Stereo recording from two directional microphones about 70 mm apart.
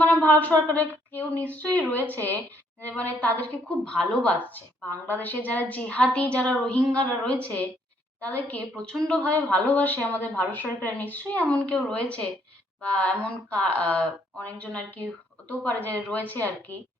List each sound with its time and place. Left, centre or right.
0.1 s a woman's voice: left
5.0 s a woman's voice: left